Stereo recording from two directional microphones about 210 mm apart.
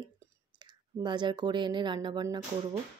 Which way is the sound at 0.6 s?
20° right (ahead or behind).